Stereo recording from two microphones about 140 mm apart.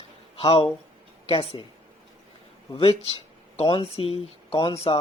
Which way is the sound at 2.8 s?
45° left (ahead or behind).